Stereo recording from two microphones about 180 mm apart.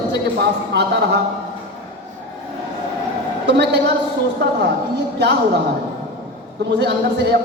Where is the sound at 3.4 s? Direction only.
70° right (ahead or behind).